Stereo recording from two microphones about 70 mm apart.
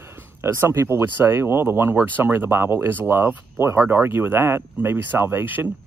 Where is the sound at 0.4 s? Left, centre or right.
Right.